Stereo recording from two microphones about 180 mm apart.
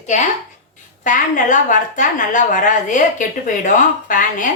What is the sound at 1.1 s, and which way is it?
A woman's voice, 45° left (ahead or behind).